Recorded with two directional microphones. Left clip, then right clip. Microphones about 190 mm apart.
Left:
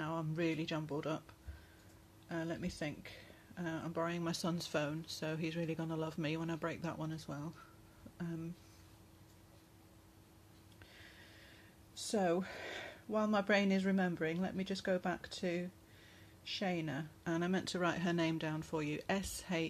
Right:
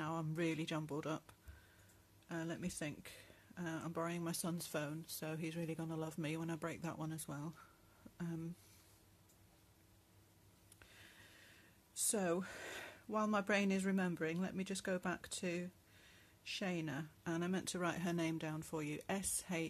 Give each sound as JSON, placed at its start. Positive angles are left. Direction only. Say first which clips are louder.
{"t": 0.0, "sound": "speech", "louder": "left 3 dB", "side_deg": -30}
{"t": 2.2, "sound": "speech", "louder": "left 4 dB", "side_deg": -30}
{"t": 11.9, "sound": "speech", "louder": "left 4 dB", "side_deg": -25}